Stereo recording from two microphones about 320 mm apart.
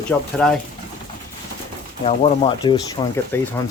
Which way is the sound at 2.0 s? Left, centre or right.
Centre.